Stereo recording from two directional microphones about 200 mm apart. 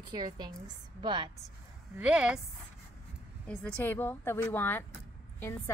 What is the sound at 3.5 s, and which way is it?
A woman's voice, 10° left (ahead or behind).